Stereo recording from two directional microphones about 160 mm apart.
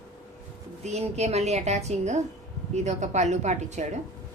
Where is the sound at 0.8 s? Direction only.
45° right (ahead or behind).